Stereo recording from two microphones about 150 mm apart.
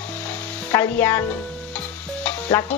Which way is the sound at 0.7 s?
15° left (ahead or behind).